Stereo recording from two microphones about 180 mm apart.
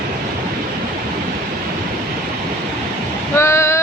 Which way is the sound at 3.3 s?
15° left (ahead or behind).